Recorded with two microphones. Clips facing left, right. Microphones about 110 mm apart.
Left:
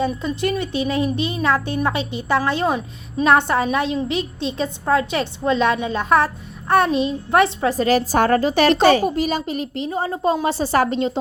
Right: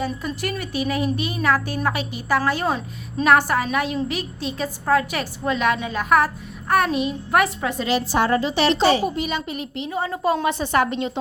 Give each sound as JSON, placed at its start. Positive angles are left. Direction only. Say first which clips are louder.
{"t": 0.0, "sound": "a woman's voice", "louder": "left 5 dB", "side_deg": 25}
{"t": 3.2, "sound": "a woman's voice", "louder": "left 1 dB", "side_deg": 25}